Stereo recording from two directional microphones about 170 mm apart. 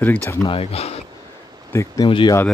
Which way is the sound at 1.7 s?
15° left (ahead or behind).